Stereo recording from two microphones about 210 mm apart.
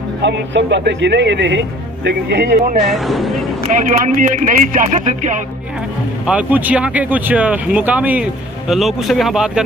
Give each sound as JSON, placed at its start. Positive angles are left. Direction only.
{"t": 0.2, "sound": "a man's voice", "side_deg": -55}
{"t": 2.9, "sound": "speech", "side_deg": 0}
{"t": 3.8, "sound": "speech", "side_deg": -35}
{"t": 6.2, "sound": "speech", "side_deg": -5}